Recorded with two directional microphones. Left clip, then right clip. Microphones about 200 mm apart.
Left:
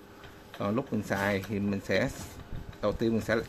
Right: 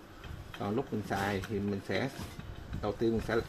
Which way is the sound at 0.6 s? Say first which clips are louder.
Left 3 dB; 50° left (ahead or behind).